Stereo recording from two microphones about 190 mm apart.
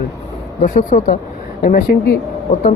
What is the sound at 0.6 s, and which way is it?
A woman's voice, 45° left (ahead or behind).